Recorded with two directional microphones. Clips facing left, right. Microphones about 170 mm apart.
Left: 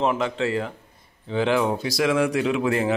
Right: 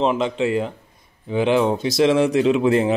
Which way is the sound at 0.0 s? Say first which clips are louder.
Right 3 dB; 20° right (ahead or behind).